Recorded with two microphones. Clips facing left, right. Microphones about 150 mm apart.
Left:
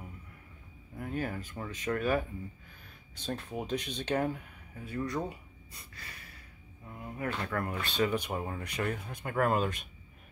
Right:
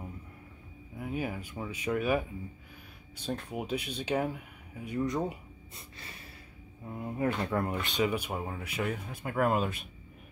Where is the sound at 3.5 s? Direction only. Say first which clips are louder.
Even; 10° right (ahead or behind).